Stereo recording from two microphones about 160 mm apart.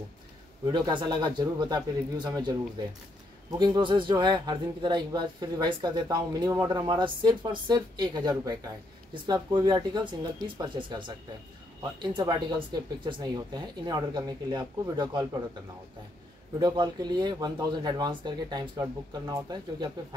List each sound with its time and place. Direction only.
0.7 s speech: 30° right (ahead or behind)
16.5 s speech: 25° right (ahead or behind)